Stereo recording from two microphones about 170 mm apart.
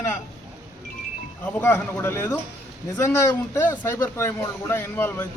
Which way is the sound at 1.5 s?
10° left (ahead or behind).